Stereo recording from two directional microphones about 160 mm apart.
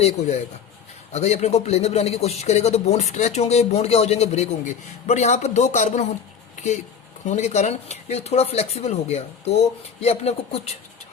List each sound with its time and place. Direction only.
0.0 s speech: 45° left (ahead or behind)
7.3 s speech: 45° left (ahead or behind)